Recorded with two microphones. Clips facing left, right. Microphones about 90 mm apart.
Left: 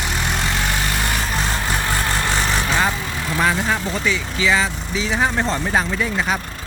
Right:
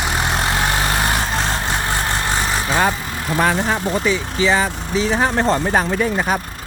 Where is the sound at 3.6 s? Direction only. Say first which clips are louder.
Right 3 dB; 35° right (ahead or behind).